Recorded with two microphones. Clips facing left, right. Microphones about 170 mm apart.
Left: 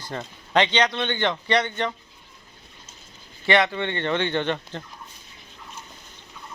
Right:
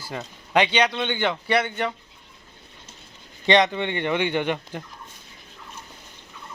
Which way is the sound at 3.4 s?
20° right (ahead or behind).